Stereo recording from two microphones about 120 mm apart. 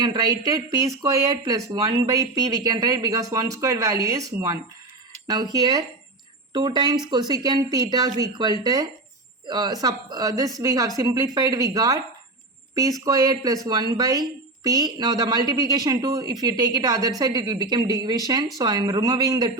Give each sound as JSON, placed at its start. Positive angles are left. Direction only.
{"t": 0.0, "sound": "speech", "side_deg": -35}